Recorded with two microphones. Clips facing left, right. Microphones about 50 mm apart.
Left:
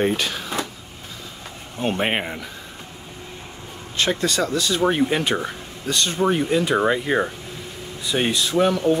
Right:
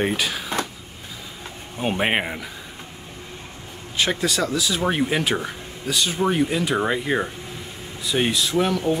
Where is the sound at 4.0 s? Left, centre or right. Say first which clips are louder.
Left 1 dB; centre.